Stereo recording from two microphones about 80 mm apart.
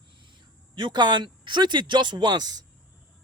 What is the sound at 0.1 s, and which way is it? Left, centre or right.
A woman's voice, right.